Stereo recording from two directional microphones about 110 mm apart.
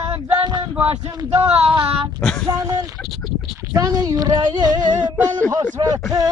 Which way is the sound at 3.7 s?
35° right (ahead or behind).